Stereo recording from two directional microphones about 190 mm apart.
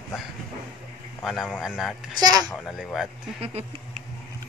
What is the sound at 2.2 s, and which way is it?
Speech, 20° right (ahead or behind).